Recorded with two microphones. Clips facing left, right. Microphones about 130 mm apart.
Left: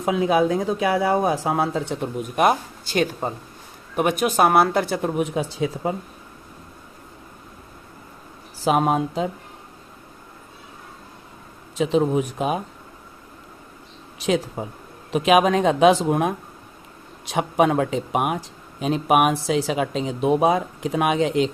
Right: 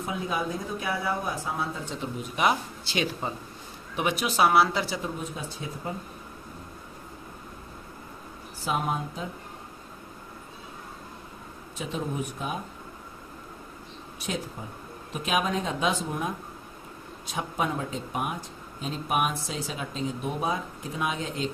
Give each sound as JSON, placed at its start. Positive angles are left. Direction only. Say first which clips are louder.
{"t": 0.0, "sound": "speech", "louder": "left 11 dB", "side_deg": 90}
{"t": 8.6, "sound": "speech", "louder": "left 10 dB", "side_deg": 85}
{"t": 11.8, "sound": "speech", "louder": "left 13 dB", "side_deg": 90}
{"t": 14.2, "sound": "speech", "louder": "left 11 dB", "side_deg": 90}